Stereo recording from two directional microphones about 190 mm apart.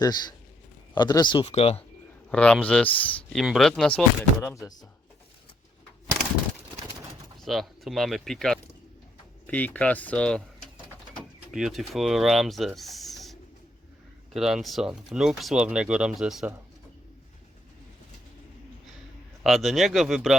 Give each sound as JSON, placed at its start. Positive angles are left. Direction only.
{"t": 0.0, "sound": "speech", "side_deg": 20}
{"t": 2.3, "sound": "speech", "side_deg": 5}
{"t": 7.3, "sound": "speech", "side_deg": 0}
{"t": 11.5, "sound": "speech", "side_deg": 0}
{"t": 14.3, "sound": "speech", "side_deg": 0}
{"t": 19.4, "sound": "speech", "side_deg": 0}